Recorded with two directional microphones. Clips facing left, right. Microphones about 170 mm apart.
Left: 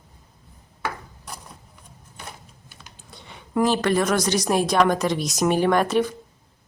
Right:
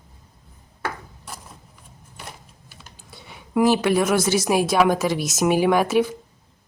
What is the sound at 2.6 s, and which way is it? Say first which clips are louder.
Speech: right 1 dB; 5° right (ahead or behind).